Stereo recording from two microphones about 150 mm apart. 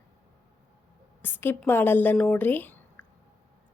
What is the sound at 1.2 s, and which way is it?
Speech, 15° left (ahead or behind).